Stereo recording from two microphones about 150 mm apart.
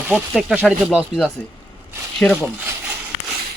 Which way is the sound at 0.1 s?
5° right (ahead or behind).